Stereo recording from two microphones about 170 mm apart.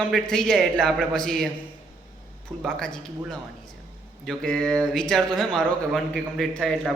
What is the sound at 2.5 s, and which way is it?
Speech, 20° right (ahead or behind).